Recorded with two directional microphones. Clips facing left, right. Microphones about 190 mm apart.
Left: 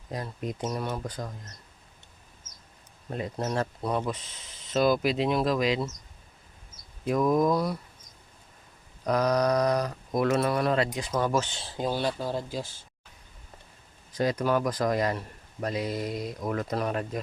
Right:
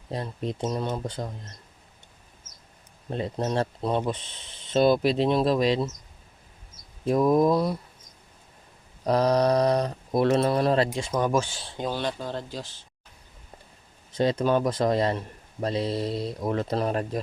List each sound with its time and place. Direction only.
0.1 s speech: 30° right (ahead or behind)
3.1 s speech: 25° right (ahead or behind)
7.0 s speech: 30° right (ahead or behind)
9.0 s speech: 30° right (ahead or behind)
11.1 s speech: 15° right (ahead or behind)
11.6 s speech: centre (ahead or behind)
14.1 s speech: 25° right (ahead or behind)